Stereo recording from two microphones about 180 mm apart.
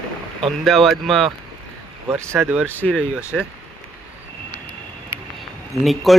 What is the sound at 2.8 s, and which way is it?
Speech, 5° left (ahead or behind).